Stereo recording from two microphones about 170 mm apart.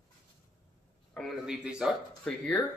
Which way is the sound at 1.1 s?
Centre (ahead or behind).